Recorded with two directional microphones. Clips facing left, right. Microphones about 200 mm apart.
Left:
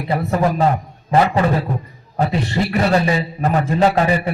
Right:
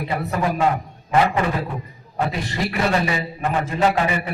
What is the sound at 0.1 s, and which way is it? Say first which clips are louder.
Speech: left 6 dB; 35° left (ahead or behind).